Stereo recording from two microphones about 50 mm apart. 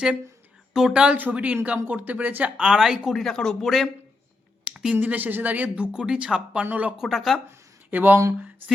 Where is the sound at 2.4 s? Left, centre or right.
Centre.